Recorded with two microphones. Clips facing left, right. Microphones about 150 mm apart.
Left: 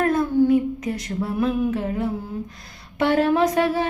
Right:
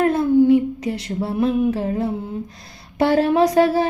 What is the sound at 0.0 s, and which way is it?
Humming, 25° right (ahead or behind).